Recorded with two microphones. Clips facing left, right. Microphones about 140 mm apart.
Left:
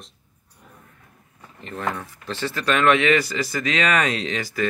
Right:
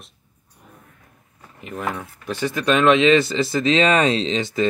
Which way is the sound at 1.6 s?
10° right (ahead or behind).